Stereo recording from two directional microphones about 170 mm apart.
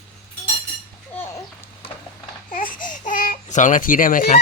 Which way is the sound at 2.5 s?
55° left (ahead or behind).